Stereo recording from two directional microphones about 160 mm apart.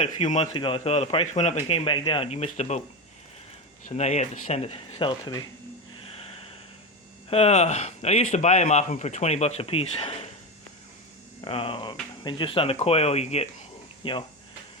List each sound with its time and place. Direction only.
0.0 s speech: 45° left (ahead or behind)
0.5 s a man's voice: 35° left (ahead or behind)
3.8 s a man's voice: 45° left (ahead or behind); by 5.5 s 25° left (ahead or behind)
6.1 s a sound: 40° left (ahead or behind)
7.3 s speech: 40° left (ahead or behind)
11.4 s a man's voice: 35° left (ahead or behind)
14.0 s speech: 30° left (ahead or behind)